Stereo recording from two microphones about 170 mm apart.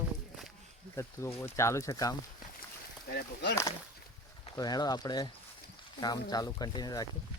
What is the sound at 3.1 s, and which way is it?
Speech, 70° left (ahead or behind).